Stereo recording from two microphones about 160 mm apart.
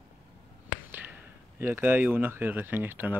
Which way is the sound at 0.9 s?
10° right (ahead or behind).